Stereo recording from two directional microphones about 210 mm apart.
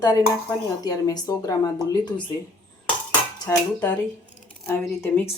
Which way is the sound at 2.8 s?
5° left (ahead or behind).